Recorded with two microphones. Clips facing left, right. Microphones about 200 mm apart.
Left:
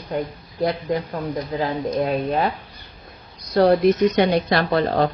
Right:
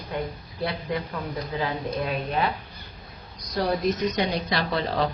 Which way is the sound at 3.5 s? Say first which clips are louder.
Left 9 dB; 65° left (ahead or behind).